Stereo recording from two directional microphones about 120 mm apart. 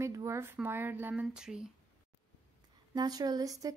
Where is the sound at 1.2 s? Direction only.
5° right (ahead or behind).